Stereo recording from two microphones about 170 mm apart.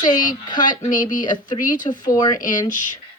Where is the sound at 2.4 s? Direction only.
50° left (ahead or behind).